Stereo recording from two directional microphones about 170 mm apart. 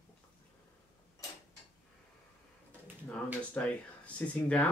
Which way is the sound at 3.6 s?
10° left (ahead or behind).